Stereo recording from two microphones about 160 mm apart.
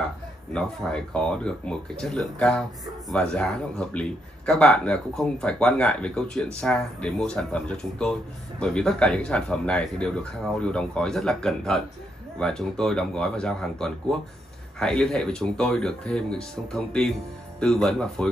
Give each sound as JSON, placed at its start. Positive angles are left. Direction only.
{"t": 0.5, "sound": "speech", "side_deg": 5}